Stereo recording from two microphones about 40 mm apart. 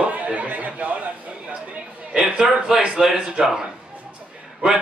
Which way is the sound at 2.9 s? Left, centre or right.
Centre.